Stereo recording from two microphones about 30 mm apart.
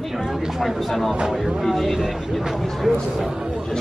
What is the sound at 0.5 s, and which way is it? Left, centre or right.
Speech, centre.